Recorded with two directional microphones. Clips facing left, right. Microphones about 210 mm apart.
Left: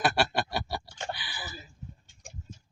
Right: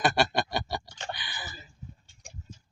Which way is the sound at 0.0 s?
5° left (ahead or behind).